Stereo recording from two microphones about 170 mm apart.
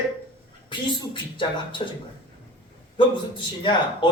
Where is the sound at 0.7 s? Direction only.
30° left (ahead or behind).